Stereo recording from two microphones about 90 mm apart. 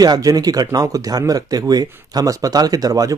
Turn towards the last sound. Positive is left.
turn(degrees=-45)  # may be behind; listen again after turning